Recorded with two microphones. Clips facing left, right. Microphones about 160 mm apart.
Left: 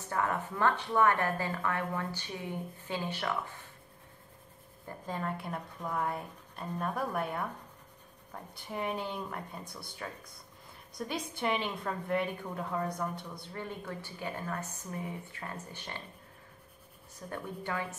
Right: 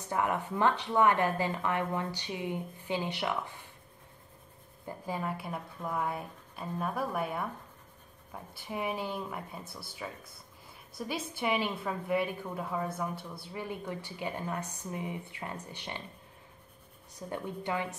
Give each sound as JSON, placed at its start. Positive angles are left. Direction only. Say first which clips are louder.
{"t": 0.1, "sound": "speech", "louder": "right 2 dB", "side_deg": -15}
{"t": 4.8, "sound": "a woman's voice", "louder": "right 1 dB", "side_deg": -10}
{"t": 17.3, "sound": "speech", "louder": "right 3 dB", "side_deg": -20}